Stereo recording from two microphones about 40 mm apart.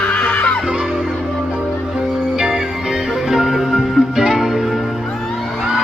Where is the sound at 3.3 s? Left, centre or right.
Centre.